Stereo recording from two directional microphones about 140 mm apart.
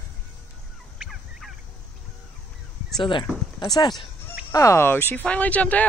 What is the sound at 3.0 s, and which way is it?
Speech, 35° left (ahead or behind).